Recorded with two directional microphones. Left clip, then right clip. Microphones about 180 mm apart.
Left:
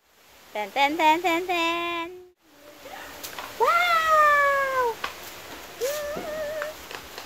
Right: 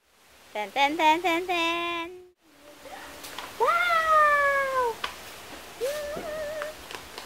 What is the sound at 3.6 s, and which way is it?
Cat, 10° left (ahead or behind).